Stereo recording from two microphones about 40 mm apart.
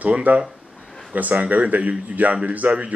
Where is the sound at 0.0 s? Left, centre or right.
Right.